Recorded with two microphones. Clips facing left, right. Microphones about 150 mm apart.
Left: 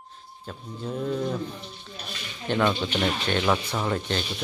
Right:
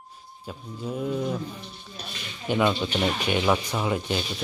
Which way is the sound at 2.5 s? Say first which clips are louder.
Right 1 dB; 10° right (ahead or behind).